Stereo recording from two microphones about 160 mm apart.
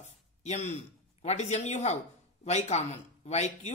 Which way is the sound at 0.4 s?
45° left (ahead or behind).